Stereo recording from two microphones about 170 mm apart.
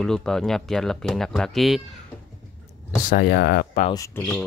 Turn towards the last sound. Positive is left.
turn(degrees=10)  # may be behind; listen again after turning